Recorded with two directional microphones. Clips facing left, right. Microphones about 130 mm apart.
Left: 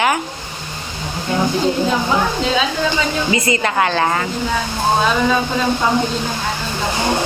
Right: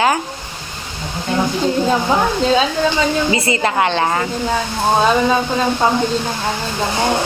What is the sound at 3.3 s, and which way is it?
Speech, 30° right (ahead or behind).